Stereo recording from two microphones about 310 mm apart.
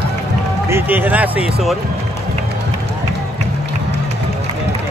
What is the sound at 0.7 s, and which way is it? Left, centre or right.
Speech, centre.